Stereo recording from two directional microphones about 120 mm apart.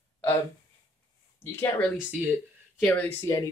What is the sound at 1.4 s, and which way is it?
Speech, 20° left (ahead or behind).